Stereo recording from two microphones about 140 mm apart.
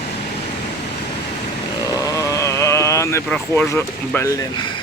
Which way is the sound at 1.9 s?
25° left (ahead or behind).